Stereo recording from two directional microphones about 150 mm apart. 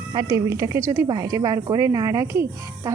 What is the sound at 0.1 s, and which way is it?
A woman's voice, 25° right (ahead or behind).